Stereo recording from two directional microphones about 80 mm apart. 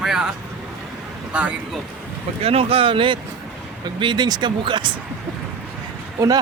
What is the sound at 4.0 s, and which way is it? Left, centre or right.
Speech, right.